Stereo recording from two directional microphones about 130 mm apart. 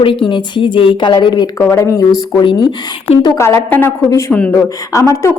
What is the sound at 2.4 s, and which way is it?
Speech, 40° left (ahead or behind).